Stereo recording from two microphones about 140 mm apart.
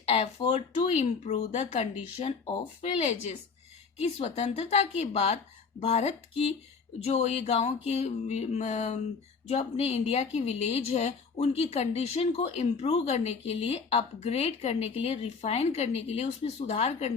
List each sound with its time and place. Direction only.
0.1 s a woman's voice: 50° left (ahead or behind)